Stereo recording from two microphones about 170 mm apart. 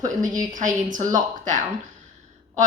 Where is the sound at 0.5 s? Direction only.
50° right (ahead or behind).